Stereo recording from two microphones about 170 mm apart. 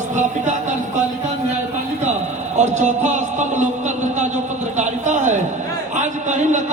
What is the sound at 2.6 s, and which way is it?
A man's voice, 45° right (ahead or behind).